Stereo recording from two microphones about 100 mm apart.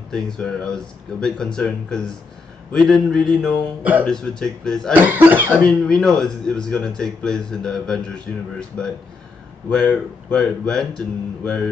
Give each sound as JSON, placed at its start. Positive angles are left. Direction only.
{"t": 0.1, "sound": "speech", "side_deg": 5}
{"t": 4.9, "sound": "speech", "side_deg": -20}
{"t": 5.7, "sound": "speech", "side_deg": 5}